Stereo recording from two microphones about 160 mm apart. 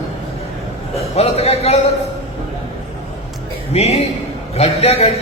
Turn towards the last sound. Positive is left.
turn(degrees=40)  # may be behind; listen again after turning